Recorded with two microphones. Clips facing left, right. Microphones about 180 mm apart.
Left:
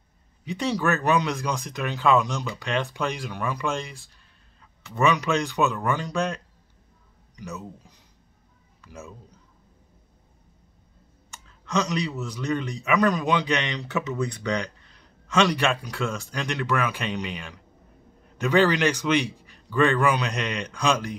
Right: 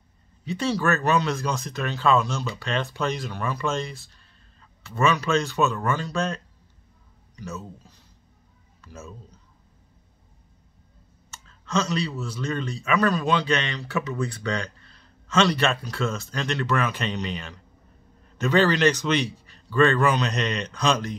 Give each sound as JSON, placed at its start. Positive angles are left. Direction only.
{"t": 0.5, "sound": "speech", "side_deg": 15}
{"t": 11.2, "sound": "clicking", "side_deg": 15}
{"t": 12.2, "sound": "speech", "side_deg": 15}